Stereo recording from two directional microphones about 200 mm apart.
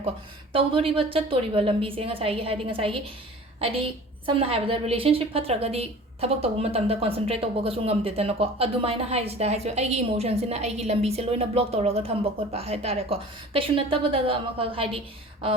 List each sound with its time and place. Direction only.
0.5 s a woman's voice: 25° right (ahead or behind)